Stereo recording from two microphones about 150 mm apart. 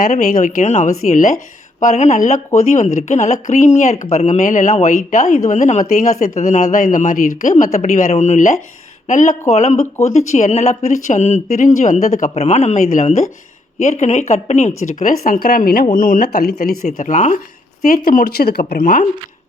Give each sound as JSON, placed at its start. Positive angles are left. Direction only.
{"t": 0.1, "sound": "a woman's voice", "side_deg": 55}
{"t": 17.8, "sound": "speech", "side_deg": 70}
{"t": 18.7, "sound": "a woman's voice", "side_deg": 65}